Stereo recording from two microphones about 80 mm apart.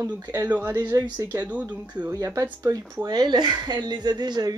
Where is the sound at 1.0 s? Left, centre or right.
Right.